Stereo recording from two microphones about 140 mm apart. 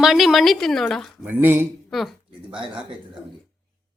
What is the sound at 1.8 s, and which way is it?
Speech, centre (ahead or behind).